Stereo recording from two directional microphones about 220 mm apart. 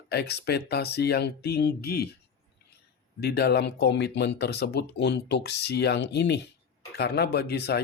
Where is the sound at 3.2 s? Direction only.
45° left (ahead or behind).